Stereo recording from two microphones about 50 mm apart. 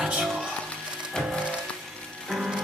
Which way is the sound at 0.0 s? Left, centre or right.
Centre.